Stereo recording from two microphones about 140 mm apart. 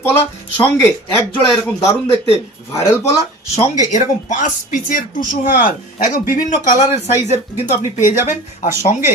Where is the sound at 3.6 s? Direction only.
60° left (ahead or behind).